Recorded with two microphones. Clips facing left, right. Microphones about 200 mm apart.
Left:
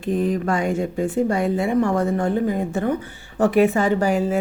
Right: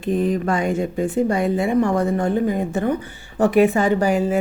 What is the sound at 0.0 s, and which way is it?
Speech, 20° right (ahead or behind).